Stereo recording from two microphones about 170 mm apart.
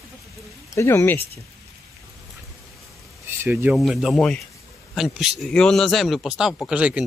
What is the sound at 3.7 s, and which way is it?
Speech, centre (ahead or behind).